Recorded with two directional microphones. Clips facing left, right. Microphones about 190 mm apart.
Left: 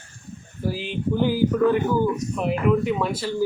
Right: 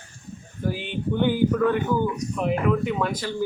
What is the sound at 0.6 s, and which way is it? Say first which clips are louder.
Speech: left 1 dB; centre (ahead or behind).